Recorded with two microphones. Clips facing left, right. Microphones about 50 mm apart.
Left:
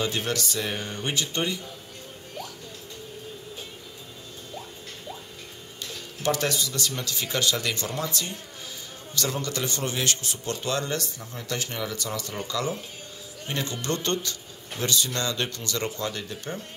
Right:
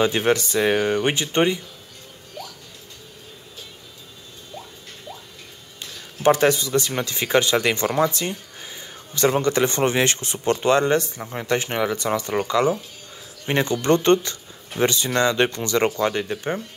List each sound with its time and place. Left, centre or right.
0.0 s speech: right
0.6 s speech: right
1.1 s speech: right
5.8 s speech: right
12.1 s speech: right
12.4 s speech: right